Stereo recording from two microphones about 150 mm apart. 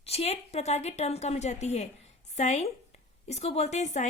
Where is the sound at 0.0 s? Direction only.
45° left (ahead or behind).